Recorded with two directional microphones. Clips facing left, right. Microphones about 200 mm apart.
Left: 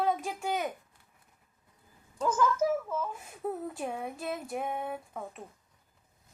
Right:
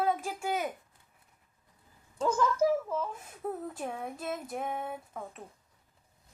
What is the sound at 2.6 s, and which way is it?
Speech, 30° right (ahead or behind).